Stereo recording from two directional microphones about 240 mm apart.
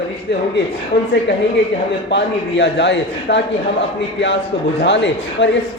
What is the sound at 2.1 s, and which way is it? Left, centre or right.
Speech, left.